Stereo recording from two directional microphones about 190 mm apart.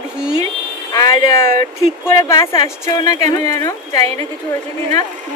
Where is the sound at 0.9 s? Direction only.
20° left (ahead or behind).